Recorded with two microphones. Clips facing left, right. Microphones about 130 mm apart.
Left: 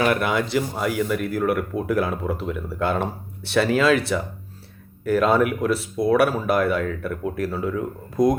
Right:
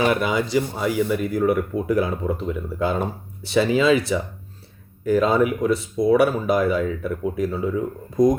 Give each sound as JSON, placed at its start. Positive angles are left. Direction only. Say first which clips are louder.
{"t": 0.0, "sound": "speech", "louder": "right 1 dB", "side_deg": 60}
{"t": 0.3, "sound": "speech", "louder": "right 1 dB", "side_deg": 0}
{"t": 5.3, "sound": "speech", "louder": "right 1 dB", "side_deg": 5}